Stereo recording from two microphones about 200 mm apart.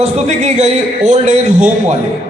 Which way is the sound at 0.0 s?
35° right (ahead or behind).